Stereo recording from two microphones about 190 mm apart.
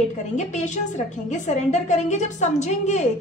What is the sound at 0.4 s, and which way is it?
A woman's voice, 40° left (ahead or behind).